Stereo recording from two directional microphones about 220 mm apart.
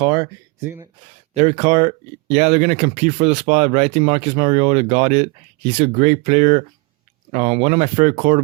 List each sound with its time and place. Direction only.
0.0 s speech: 20° right (ahead or behind)
1.3 s speech: 30° right (ahead or behind)